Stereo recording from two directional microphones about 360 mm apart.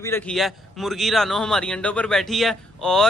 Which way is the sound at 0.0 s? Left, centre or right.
Centre.